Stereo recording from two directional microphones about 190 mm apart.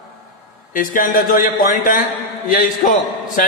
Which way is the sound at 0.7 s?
45° left (ahead or behind).